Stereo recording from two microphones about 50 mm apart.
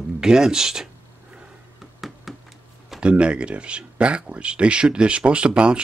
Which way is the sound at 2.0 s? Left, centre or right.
Centre.